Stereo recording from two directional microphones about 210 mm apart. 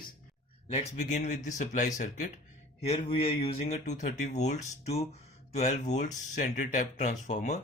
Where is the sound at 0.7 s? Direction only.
30° left (ahead or behind).